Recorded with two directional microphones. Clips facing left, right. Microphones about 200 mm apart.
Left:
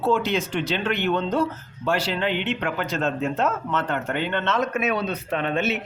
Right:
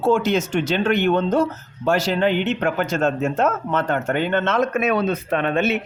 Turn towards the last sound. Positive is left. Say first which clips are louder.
# right 4 dB
turn(degrees=-55)  # may be behind; listen again after turning